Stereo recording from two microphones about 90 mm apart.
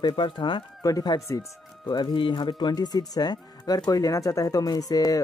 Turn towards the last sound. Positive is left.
turn(degrees=45)  # may be behind; listen again after turning